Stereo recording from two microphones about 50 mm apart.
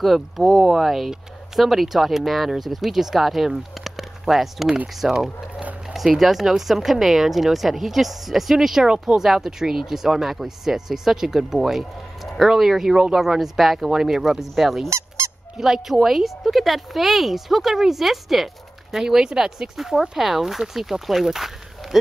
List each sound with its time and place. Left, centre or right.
0.0 s speech: centre
14.9 s honk: right
15.5 s speech: centre